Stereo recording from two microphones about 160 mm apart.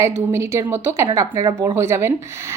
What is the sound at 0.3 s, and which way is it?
A woman's voice, 15° right (ahead or behind).